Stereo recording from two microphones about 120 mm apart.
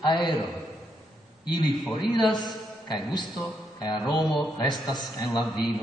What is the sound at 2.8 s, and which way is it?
Speech, 40° left (ahead or behind).